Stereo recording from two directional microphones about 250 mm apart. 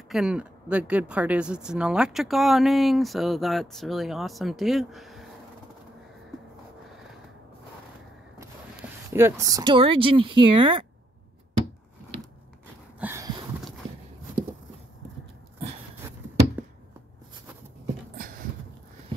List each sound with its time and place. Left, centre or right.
0.1 s speech: centre
9.1 s speech: centre
13.0 s a sound: centre